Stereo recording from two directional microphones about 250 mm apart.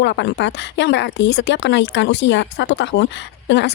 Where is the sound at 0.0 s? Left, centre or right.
Left.